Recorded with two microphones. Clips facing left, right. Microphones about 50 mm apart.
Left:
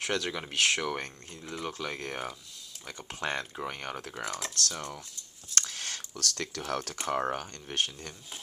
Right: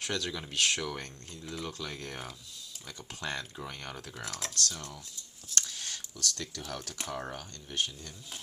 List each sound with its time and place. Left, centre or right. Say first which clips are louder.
0.0 s speech: left 3 dB; left
3.0 s speech: left 4 dB; left
4.1 s speech: left 4 dB; centre
5.5 s speech: left 2 dB; left